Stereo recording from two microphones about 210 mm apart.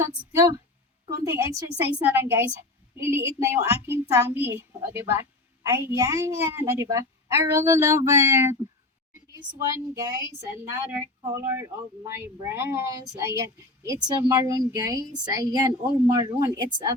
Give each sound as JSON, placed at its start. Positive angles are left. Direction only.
{"t": 0.3, "sound": "speech", "side_deg": -15}
{"t": 11.2, "sound": "speech", "side_deg": -15}